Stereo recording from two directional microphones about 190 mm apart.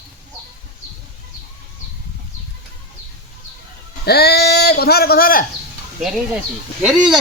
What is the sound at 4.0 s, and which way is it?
Speech, 55° left (ahead or behind).